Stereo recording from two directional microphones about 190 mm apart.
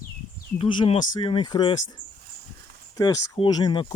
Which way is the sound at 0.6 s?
30° left (ahead or behind).